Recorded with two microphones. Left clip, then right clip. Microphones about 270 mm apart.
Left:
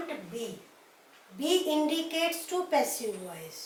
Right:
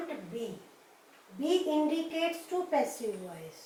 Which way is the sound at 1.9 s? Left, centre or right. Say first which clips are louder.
Left 2 dB; centre.